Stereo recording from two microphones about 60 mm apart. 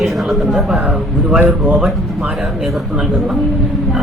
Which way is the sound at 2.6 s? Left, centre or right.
Centre.